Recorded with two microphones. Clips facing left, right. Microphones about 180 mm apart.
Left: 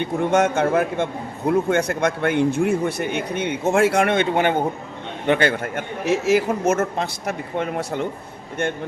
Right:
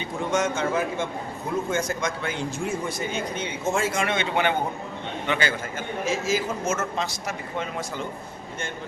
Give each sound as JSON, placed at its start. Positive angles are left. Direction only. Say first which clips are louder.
{"t": 0.0, "sound": "a man's voice", "louder": "left 7 dB", "side_deg": 60}